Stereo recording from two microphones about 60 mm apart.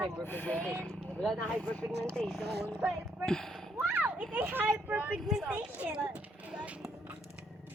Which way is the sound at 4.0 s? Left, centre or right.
Right.